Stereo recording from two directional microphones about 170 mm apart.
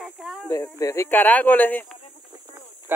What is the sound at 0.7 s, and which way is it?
Speech, 15° left (ahead or behind).